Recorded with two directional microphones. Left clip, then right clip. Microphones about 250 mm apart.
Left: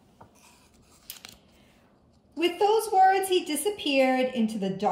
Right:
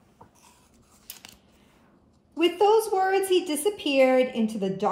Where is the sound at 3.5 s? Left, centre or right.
Centre.